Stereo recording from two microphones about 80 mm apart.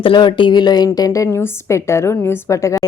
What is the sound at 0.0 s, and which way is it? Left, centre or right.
Speech, left.